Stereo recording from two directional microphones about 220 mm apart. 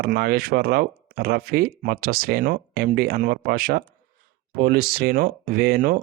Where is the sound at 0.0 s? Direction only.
45° right (ahead or behind).